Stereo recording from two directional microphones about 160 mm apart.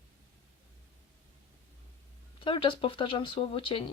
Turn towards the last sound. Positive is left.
turn(degrees=35)  # may be behind; listen again after turning